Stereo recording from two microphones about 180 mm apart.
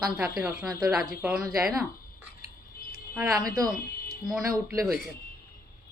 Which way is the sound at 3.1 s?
5° right (ahead or behind).